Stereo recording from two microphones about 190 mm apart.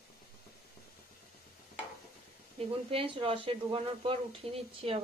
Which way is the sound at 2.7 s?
30° right (ahead or behind).